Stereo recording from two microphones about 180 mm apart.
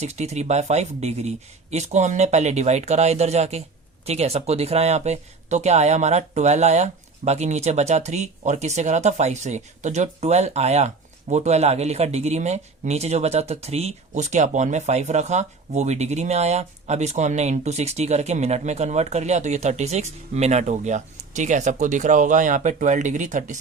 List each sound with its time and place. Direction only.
0.0 s speech: 35° right (ahead or behind)